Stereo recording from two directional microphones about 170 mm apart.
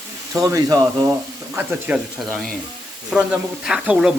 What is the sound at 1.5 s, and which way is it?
Speech, 10° right (ahead or behind).